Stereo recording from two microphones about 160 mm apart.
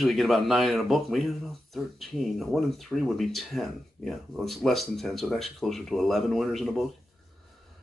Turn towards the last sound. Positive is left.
turn(degrees=0)  # may be behind; listen again after turning